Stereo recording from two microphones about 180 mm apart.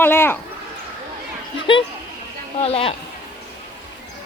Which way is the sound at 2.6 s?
35° left (ahead or behind).